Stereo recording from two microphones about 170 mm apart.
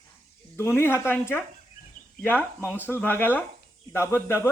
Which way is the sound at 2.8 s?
10° left (ahead or behind).